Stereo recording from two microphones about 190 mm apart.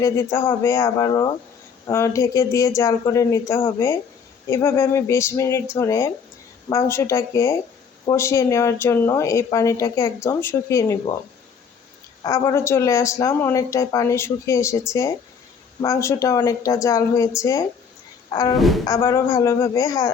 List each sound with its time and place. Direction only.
0.0 s speech: 15° left (ahead or behind)
12.2 s speech: 15° left (ahead or behind)
18.5 s speech: centre (ahead or behind)
18.9 s speech: 15° left (ahead or behind)